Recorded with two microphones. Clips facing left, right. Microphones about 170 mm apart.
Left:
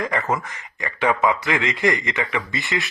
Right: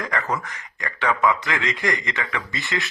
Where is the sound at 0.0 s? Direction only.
15° left (ahead or behind).